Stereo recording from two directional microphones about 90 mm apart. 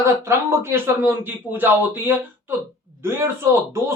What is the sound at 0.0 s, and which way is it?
Speech, 30° right (ahead or behind).